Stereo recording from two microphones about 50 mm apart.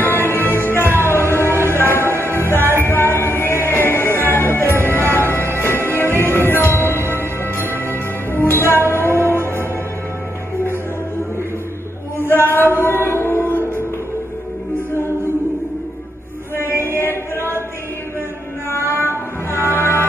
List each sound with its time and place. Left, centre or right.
0.0 s music: left
12.2 s chant: left
12.7 s mantra: left
13.5 s music: left
16.8 s chant: left
18.7 s music: left